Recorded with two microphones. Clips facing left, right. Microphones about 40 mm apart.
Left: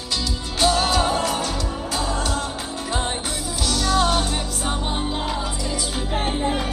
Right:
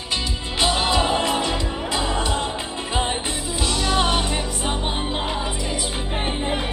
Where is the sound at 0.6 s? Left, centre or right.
Right.